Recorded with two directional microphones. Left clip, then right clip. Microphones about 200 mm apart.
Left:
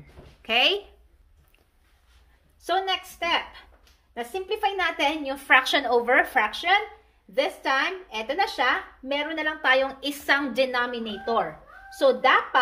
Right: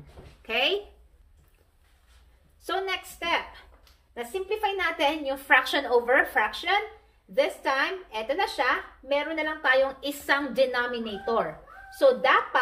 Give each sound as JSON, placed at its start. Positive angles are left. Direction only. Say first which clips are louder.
{"t": 0.4, "sound": "speech", "louder": "left 4 dB", "side_deg": 50}
{"t": 2.6, "sound": "speech", "louder": "left 4 dB", "side_deg": 40}